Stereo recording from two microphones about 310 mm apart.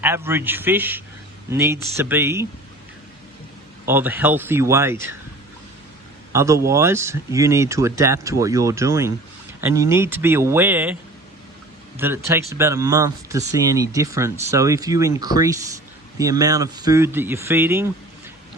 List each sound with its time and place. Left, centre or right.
0.0 s speech: centre
3.8 s speech: centre
6.3 s speech: centre
11.9 s speech: centre